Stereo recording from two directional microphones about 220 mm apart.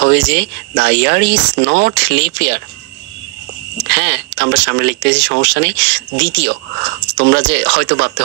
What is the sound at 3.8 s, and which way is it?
Speech, 50° right (ahead or behind).